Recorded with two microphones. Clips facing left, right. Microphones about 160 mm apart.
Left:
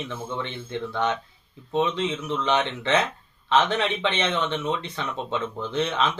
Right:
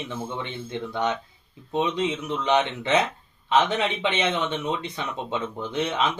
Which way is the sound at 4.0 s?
20° right (ahead or behind).